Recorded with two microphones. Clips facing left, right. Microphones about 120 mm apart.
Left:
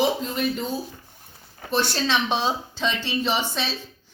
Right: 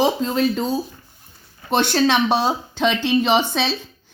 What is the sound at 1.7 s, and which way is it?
Speech, 65° right (ahead or behind).